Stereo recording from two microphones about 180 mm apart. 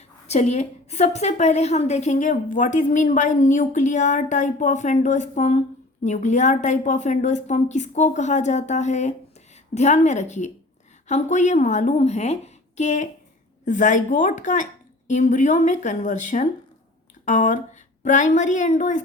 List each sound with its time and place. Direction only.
0.3 s a woman's voice: 40° left (ahead or behind)